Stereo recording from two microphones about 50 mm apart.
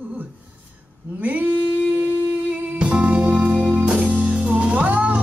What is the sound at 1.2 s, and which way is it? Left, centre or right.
Music, right.